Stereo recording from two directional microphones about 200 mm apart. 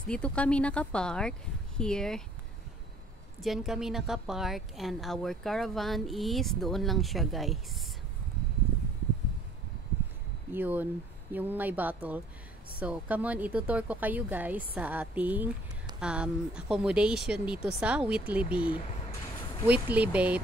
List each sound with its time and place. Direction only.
0.0 s a woman's voice: 5° left (ahead or behind)
3.3 s a woman's voice: centre (ahead or behind)
10.5 s a woman's voice: 10° right (ahead or behind)